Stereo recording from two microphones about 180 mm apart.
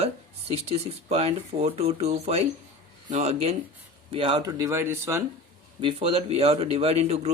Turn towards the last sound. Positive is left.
turn(degrees=-35)  # may be behind; listen again after turning